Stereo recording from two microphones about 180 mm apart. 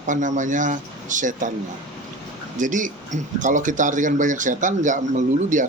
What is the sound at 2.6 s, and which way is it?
Speech, 45° right (ahead or behind).